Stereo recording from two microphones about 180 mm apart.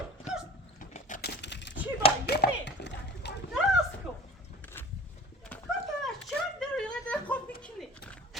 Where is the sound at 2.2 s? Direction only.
65° left (ahead or behind).